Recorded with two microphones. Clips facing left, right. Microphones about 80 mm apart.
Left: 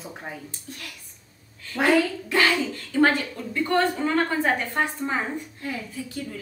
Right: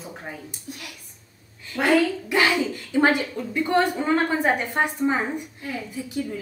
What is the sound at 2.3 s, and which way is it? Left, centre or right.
A woman's voice, centre.